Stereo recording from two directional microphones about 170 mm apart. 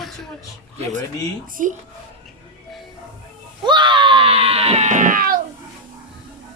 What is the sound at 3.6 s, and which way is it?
Speech, 25° right (ahead or behind).